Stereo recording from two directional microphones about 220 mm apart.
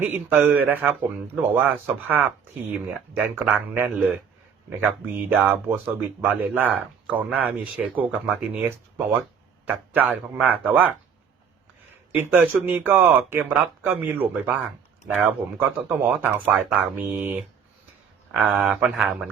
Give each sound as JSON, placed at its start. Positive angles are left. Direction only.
{"t": 0.0, "sound": "speech", "side_deg": -10}
{"t": 5.1, "sound": "speech", "side_deg": -10}
{"t": 9.6, "sound": "a man's voice", "side_deg": -10}
{"t": 12.1, "sound": "speech", "side_deg": -10}